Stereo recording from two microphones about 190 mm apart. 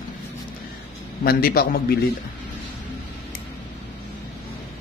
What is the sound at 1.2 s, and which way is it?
Speech, 50° left (ahead or behind).